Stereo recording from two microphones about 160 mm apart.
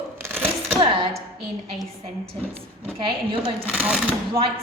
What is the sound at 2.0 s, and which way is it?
A woman's voice, 35° right (ahead or behind).